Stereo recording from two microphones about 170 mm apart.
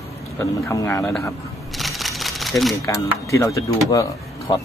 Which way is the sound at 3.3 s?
20° left (ahead or behind).